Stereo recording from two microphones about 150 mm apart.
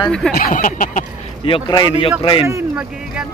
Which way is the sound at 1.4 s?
35° left (ahead or behind).